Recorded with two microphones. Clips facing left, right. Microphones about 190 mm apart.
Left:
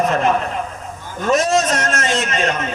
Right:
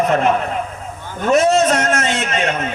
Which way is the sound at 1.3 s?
60° right (ahead or behind).